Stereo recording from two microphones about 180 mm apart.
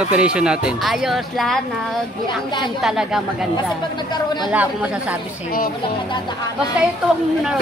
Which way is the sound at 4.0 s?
25° left (ahead or behind).